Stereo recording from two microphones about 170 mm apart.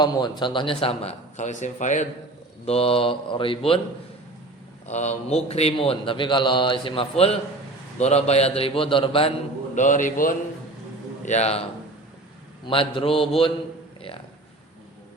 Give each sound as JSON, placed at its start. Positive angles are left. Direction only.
{"t": 0.0, "sound": "a man's voice", "side_deg": 25}
{"t": 4.9, "sound": "a man's voice", "side_deg": 40}
{"t": 9.7, "sound": "a man's voice", "side_deg": 50}
{"t": 11.3, "sound": "a man's voice", "side_deg": 40}
{"t": 12.6, "sound": "a man's voice", "side_deg": 30}